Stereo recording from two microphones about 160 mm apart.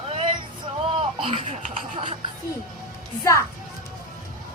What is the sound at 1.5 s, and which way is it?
Speech, 50° right (ahead or behind).